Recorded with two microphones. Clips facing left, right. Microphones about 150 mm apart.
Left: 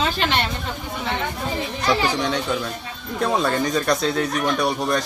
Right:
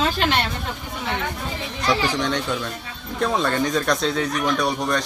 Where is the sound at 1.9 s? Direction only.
5° left (ahead or behind).